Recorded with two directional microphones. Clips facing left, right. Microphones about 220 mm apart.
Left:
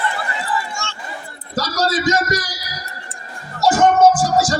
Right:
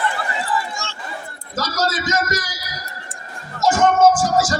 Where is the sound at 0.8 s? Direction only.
35° right (ahead or behind).